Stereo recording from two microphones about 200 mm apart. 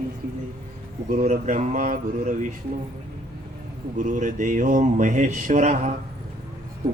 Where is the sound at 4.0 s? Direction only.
40° right (ahead or behind).